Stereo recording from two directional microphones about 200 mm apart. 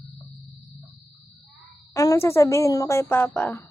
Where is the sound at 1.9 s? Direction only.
15° left (ahead or behind).